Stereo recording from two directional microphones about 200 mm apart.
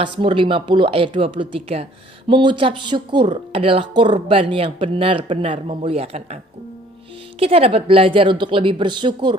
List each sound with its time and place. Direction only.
0.0 s speech: 25° right (ahead or behind)